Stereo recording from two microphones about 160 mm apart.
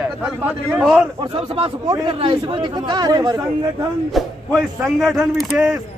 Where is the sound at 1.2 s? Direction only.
35° right (ahead or behind).